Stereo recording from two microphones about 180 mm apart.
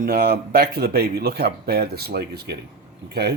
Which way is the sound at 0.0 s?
55° right (ahead or behind).